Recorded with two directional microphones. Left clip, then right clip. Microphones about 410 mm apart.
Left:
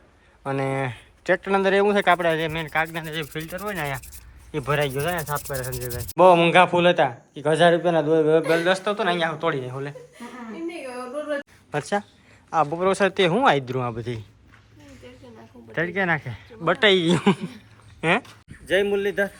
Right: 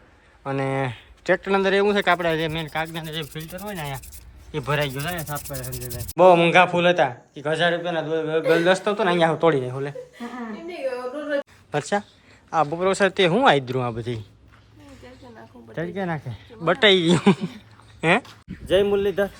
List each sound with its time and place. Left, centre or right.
0.4 s sanding: centre
11.7 s sanding: centre
15.7 s sanding: centre
18.0 s speech: centre